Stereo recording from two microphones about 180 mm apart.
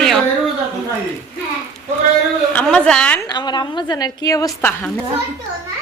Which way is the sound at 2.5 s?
5° left (ahead or behind).